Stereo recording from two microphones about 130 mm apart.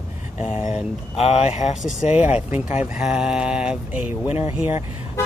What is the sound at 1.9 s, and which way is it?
Speech, 75° left (ahead or behind).